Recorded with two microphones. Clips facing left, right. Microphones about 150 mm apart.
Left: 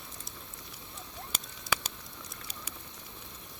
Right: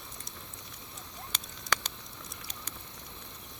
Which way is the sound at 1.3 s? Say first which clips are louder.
Even; 5° left (ahead or behind).